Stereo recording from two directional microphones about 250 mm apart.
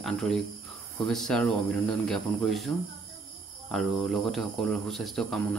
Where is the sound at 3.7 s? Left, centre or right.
Centre.